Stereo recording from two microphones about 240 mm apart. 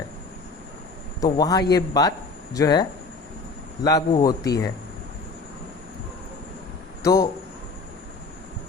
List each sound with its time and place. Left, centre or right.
1.2 s speech: centre
3.8 s speech: centre
7.0 s speech: centre